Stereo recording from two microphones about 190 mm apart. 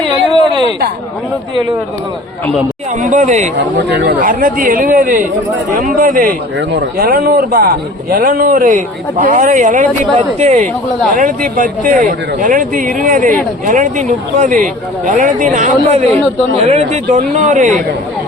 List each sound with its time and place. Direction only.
0.0 s a sound: 25° right (ahead or behind)
3.0 s speech: 40° right (ahead or behind)
3.8 s speech: 60° right (ahead or behind)
4.2 s speech: 45° right (ahead or behind)
6.6 s speech: 60° right (ahead or behind); by 17.7 s 40° right (ahead or behind)